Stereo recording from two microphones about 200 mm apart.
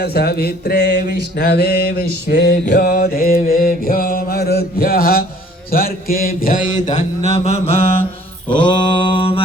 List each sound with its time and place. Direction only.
0.0 s mantra: 50° left (ahead or behind); by 9.4 s 25° left (ahead or behind)